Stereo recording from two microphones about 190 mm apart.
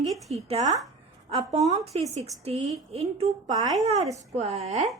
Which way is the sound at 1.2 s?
30° right (ahead or behind).